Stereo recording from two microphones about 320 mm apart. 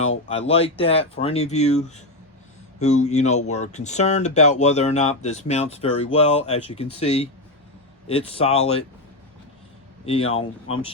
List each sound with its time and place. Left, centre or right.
0.6 s speech: centre
10.1 s speech: centre